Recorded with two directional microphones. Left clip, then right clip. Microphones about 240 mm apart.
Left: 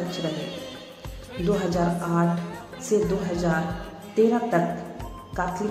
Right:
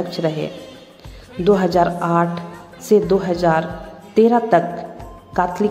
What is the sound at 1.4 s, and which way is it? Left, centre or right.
A woman's voice, right.